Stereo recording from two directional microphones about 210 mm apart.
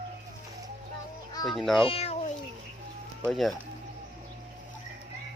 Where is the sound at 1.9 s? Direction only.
30° left (ahead or behind).